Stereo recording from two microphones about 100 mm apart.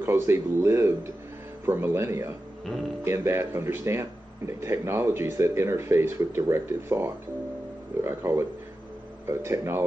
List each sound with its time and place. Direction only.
0.0 s speech: 25° right (ahead or behind)